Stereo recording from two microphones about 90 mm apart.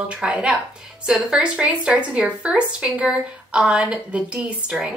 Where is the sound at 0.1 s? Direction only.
10° right (ahead or behind).